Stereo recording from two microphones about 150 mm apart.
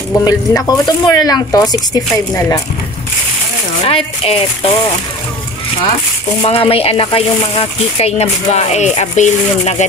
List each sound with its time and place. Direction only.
0.2 s speech: 25° left (ahead or behind)
3.8 s speech: 40° left (ahead or behind)
6.4 s speech: 40° left (ahead or behind)